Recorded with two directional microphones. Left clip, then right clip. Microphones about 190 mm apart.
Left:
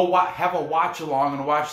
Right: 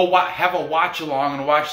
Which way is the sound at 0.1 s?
5° left (ahead or behind).